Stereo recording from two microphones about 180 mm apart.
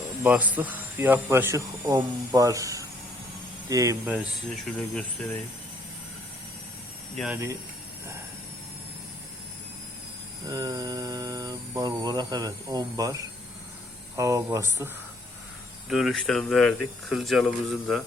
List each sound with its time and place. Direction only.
0.2 s speech: 10° right (ahead or behind)
4.0 s speech: 5° right (ahead or behind)
10.4 s speech: 20° right (ahead or behind)
15.9 s speech: centre (ahead or behind)